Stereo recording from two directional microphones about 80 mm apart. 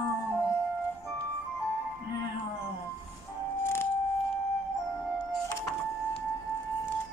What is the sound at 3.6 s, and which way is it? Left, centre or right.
Music, left.